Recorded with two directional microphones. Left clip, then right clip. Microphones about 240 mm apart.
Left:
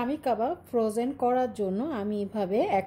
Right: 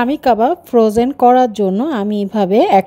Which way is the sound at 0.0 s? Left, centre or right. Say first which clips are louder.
Right 15 dB; right.